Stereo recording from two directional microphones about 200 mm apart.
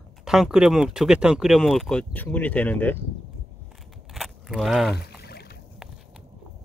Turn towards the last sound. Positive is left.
turn(degrees=55)  # may be behind; listen again after turning